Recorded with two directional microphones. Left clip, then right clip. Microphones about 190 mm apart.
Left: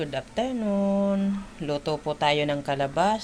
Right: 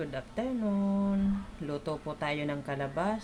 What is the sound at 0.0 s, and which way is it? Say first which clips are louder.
Speech: left 7 dB; 20° left (ahead or behind).